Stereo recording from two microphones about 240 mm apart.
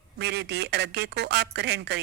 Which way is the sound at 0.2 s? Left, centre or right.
Right.